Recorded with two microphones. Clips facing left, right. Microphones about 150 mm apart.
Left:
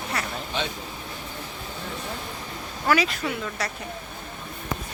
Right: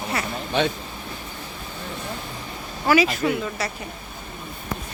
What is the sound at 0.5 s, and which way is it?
Speech, 60° right (ahead or behind).